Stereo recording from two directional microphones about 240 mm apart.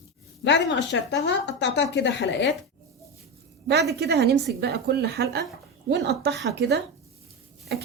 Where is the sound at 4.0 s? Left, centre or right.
Right.